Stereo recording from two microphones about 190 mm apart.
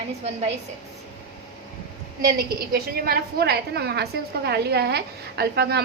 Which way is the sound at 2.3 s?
55° right (ahead or behind).